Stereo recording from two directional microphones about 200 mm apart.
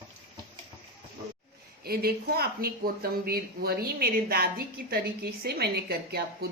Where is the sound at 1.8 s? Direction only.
50° right (ahead or behind).